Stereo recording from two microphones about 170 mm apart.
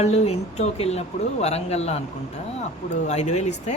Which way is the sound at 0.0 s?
40° left (ahead or behind).